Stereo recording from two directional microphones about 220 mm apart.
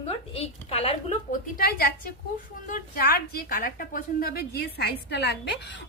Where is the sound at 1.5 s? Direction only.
45° left (ahead or behind).